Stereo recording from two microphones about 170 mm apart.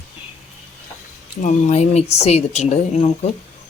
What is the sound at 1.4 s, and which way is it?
Speech, 45° left (ahead or behind).